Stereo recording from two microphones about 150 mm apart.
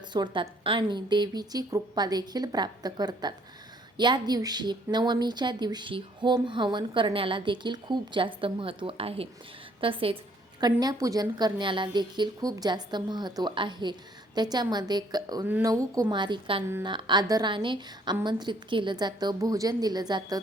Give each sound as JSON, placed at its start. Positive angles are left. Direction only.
{"t": 0.1, "sound": "a woman's voice", "side_deg": -30}